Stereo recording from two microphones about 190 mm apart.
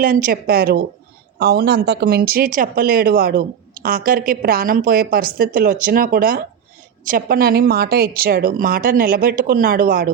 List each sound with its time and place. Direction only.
0.0 s speech: 45° right (ahead or behind)